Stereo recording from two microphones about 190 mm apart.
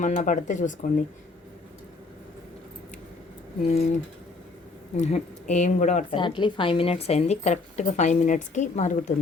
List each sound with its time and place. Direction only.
0.0 s a woman's voice: 40° left (ahead or behind)
3.7 s a woman's voice: 35° left (ahead or behind)
6.1 s a woman's voice: 25° left (ahead or behind)